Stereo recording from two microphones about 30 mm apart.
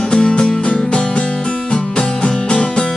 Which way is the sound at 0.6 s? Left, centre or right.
Left.